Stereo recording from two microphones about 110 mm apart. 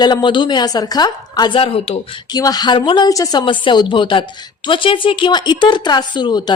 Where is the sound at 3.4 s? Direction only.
45° left (ahead or behind).